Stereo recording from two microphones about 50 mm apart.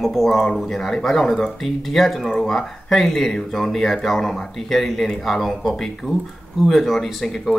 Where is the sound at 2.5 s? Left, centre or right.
Centre.